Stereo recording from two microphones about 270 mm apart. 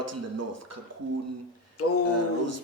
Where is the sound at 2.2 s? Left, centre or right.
Right.